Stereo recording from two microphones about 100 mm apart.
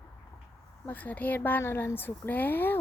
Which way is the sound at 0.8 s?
15° left (ahead or behind).